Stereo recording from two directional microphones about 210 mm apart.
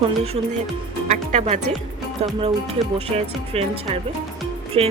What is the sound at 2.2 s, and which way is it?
Speech, 30° right (ahead or behind).